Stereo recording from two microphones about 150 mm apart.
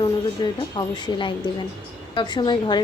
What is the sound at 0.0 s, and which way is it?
A woman's voice, 30° left (ahead or behind).